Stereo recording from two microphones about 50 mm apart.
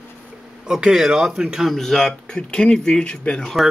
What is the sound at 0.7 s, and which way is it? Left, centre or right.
Speech, centre.